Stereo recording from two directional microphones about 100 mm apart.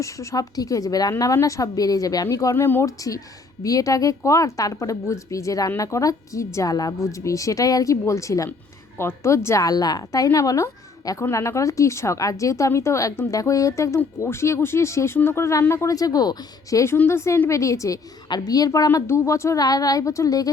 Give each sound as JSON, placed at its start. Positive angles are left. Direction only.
{"t": 0.0, "sound": "a woman's voice", "side_deg": 30}
{"t": 2.8, "sound": "a woman's voice", "side_deg": 35}